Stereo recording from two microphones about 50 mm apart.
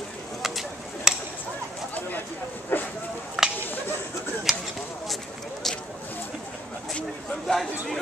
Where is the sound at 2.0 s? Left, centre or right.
Left.